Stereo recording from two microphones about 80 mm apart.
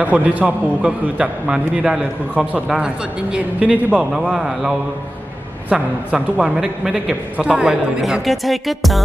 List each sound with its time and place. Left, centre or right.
0.0 s a man's voice: centre
8.0 s speech: centre